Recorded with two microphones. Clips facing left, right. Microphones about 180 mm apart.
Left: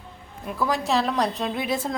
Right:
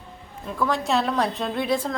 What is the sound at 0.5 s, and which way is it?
A woman's voice, 5° left (ahead or behind).